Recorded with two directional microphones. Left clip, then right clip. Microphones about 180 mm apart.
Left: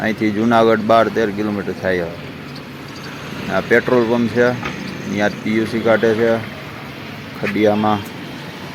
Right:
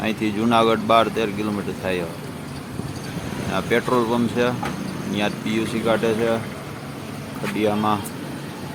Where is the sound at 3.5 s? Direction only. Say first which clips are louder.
Left 6 dB; 15° left (ahead or behind).